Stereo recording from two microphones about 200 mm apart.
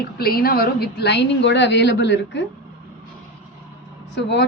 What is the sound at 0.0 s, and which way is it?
A woman's voice, 50° left (ahead or behind).